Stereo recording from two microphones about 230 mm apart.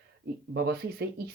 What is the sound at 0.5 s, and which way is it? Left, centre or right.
Speech, right.